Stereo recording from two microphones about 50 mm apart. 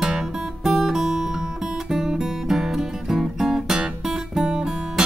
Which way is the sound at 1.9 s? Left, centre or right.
Centre.